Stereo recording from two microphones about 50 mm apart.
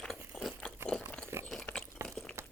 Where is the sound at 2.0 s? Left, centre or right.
Right.